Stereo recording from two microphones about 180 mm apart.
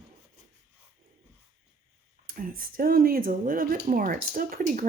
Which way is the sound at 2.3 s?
50° right (ahead or behind).